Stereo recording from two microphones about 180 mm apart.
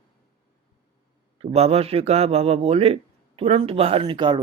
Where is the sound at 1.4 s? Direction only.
35° right (ahead or behind).